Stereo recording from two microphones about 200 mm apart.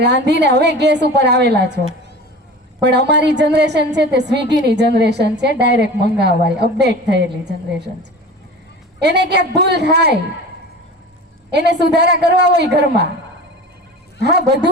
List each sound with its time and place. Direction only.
0.0 s a woman's voice: 55° right (ahead or behind)
2.8 s a woman's voice: 60° right (ahead or behind)
9.0 s a woman's voice: 60° right (ahead or behind)
11.5 s a woman's voice: 55° right (ahead or behind)
14.2 s a woman's voice: 55° right (ahead or behind)